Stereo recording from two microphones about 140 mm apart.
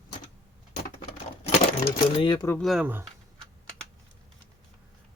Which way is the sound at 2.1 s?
35° left (ahead or behind).